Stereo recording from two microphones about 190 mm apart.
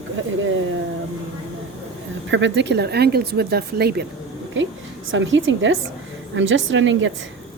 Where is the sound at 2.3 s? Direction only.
70° right (ahead or behind).